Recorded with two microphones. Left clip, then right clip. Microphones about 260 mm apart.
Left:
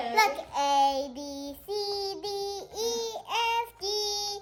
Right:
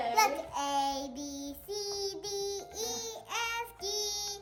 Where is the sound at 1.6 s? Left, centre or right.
Left.